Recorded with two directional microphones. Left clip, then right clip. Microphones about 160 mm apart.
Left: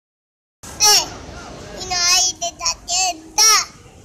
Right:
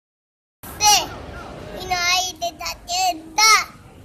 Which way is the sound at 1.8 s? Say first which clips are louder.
Left 3 dB; 20° right (ahead or behind).